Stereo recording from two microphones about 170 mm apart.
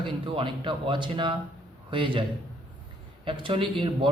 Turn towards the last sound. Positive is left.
turn(degrees=-30)  # may be behind; listen again after turning